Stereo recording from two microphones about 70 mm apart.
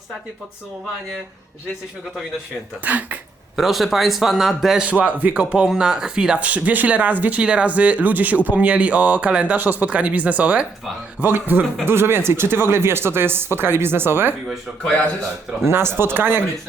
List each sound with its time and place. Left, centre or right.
2.8 s speech: right
3.5 s a man's voice: centre
4.9 s speech: right
15.6 s speech: right